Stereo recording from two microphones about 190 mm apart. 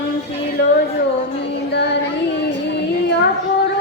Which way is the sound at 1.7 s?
60° left (ahead or behind).